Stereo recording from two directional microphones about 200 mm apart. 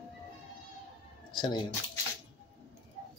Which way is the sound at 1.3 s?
20° left (ahead or behind).